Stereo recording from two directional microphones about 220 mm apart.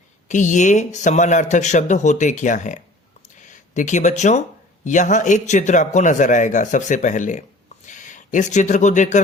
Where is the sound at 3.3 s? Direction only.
35° left (ahead or behind).